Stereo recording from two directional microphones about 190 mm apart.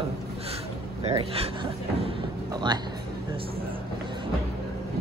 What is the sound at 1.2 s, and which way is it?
Speech, 30° right (ahead or behind).